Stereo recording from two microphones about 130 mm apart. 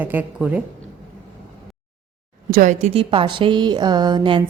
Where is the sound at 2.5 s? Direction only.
85° right.